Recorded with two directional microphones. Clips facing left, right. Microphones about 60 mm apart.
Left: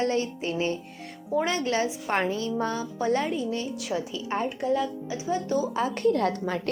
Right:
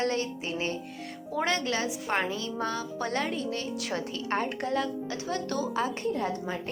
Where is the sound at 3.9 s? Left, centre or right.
Right.